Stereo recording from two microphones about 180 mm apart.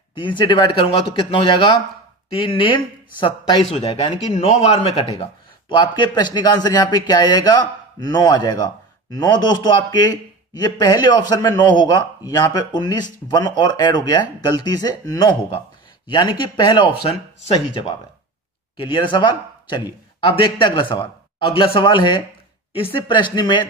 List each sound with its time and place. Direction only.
0.1 s a man's voice: 25° left (ahead or behind)
18.8 s a man's voice: 25° left (ahead or behind)